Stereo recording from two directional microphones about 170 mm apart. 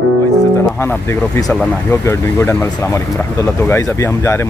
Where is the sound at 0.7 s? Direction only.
15° left (ahead or behind).